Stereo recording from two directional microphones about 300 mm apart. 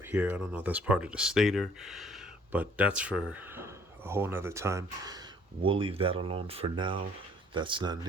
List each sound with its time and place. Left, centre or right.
0.0 s speech: centre